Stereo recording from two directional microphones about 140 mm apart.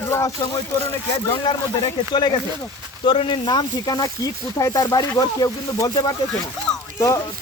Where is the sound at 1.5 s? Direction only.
30° left (ahead or behind).